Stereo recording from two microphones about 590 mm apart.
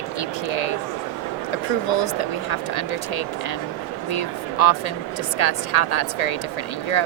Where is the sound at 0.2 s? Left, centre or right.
Left.